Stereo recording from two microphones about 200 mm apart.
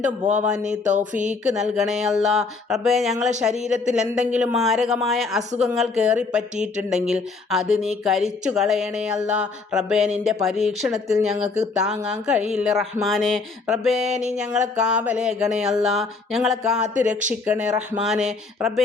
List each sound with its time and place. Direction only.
0.3 s speech: 5° right (ahead or behind)
0.6 s speech: 35° right (ahead or behind)
1.5 s speech: 5° right (ahead or behind)
16.9 s speech: 40° right (ahead or behind)
17.4 s speech: 5° right (ahead or behind)